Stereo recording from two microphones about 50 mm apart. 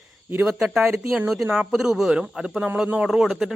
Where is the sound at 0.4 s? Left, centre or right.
Centre.